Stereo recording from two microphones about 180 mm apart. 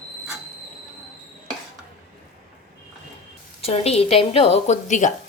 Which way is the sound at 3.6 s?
35° left (ahead or behind).